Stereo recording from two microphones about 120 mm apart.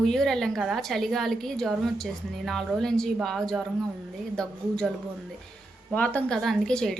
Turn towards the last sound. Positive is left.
turn(degrees=5)  # may be behind; listen again after turning